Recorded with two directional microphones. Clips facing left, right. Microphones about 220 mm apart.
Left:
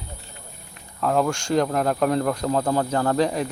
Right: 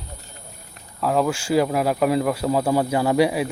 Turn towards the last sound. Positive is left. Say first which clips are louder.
# right 3 dB
turn(degrees=-10)  # may be behind; listen again after turning